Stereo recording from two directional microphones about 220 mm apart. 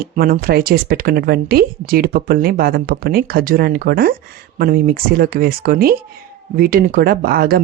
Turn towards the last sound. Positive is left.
turn(degrees=-40)  # may be behind; listen again after turning